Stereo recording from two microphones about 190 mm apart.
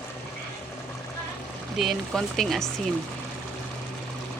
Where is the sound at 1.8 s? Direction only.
Centre (ahead or behind).